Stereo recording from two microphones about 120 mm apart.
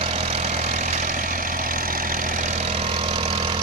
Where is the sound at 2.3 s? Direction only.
85° right; by 3.6 s 45° right (ahead or behind).